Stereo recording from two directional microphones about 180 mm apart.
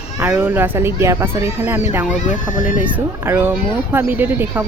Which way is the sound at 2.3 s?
45° left (ahead or behind).